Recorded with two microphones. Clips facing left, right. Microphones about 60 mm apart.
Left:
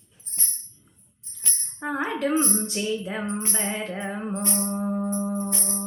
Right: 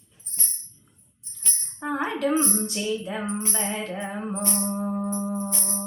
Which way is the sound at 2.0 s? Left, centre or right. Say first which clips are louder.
Right 1 dB; left.